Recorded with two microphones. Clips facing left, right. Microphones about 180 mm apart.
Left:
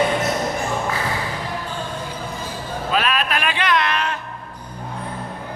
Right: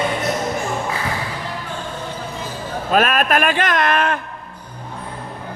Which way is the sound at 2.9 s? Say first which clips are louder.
Right 6 dB; 50° right (ahead or behind).